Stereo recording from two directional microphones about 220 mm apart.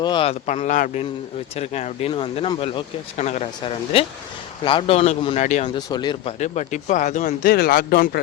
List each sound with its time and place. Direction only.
0.0 s speech: 20° left (ahead or behind)
6.4 s speech: 30° left (ahead or behind)